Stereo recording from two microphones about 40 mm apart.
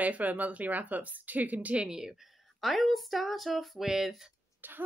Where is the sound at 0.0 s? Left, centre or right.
Right.